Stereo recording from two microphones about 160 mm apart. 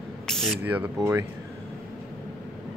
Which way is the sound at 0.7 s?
10° right (ahead or behind).